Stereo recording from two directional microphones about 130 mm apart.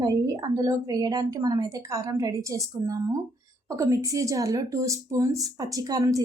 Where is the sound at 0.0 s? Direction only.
30° right (ahead or behind).